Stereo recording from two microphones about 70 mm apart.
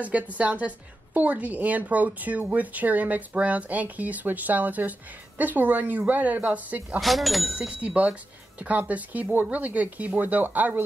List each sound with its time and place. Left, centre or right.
0.0 s a woman's voice: right
7.0 s speech: centre
7.5 s a woman's voice: centre